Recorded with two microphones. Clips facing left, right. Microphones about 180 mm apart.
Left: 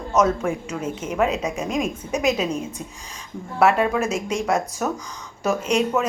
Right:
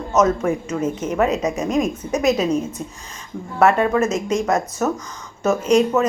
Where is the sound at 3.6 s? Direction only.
5° left (ahead or behind).